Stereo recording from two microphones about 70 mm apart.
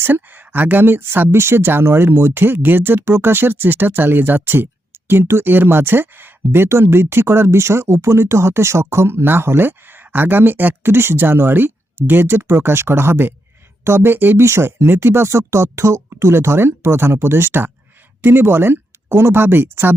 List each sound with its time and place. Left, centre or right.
0.0 s speech: right